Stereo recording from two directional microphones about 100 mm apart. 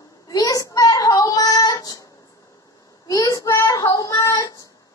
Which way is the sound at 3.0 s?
40° left (ahead or behind).